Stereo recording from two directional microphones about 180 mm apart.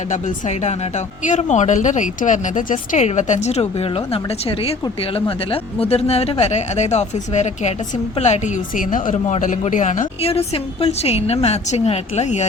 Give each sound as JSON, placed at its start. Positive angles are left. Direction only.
{"t": 0.1, "sound": "speech", "side_deg": 40}